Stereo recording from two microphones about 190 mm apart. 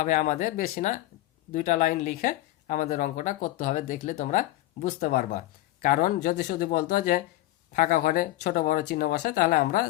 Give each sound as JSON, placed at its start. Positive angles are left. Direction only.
{"t": 0.0, "sound": "speech", "side_deg": 45}